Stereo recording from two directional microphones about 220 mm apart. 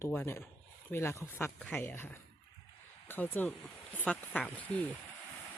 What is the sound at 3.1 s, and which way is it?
Speech, 10° left (ahead or behind).